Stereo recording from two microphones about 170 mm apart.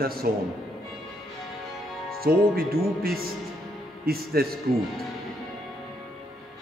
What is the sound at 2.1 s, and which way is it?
Speech, 60° right (ahead or behind).